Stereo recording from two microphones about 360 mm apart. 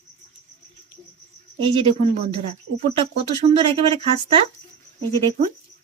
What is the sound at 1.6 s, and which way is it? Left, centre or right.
Speech, centre.